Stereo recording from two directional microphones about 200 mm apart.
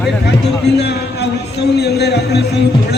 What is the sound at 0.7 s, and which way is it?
A man's voice, 55° left (ahead or behind).